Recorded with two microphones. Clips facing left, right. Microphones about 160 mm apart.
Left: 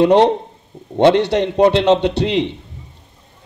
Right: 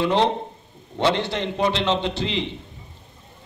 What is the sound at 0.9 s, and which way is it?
A man's voice, 65° left (ahead or behind).